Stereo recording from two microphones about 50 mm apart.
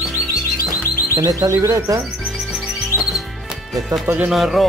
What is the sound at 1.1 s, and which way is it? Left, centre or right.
Speech, right.